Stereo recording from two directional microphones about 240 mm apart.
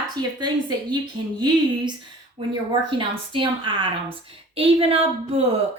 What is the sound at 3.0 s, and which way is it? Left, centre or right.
Speech, right.